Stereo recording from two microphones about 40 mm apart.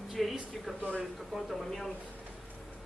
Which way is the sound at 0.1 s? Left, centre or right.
Centre.